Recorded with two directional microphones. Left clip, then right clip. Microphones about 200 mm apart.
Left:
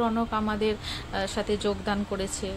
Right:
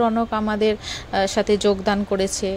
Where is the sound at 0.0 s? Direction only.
25° right (ahead or behind).